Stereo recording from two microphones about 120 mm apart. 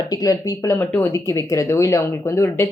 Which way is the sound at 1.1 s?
25° left (ahead or behind).